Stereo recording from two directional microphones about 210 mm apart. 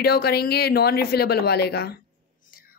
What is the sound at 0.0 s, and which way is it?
A woman's voice, 50° left (ahead or behind).